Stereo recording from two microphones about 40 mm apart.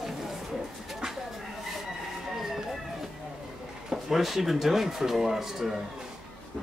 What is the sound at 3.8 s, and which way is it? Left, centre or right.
Speech, centre.